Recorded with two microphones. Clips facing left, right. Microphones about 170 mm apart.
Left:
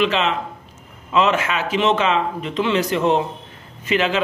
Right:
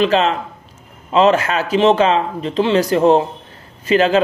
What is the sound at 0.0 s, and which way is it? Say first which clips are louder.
Speech: right 4 dB; 40° right (ahead or behind).